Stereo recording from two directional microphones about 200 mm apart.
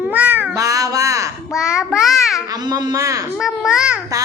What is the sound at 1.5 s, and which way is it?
Child singing, 5° right (ahead or behind).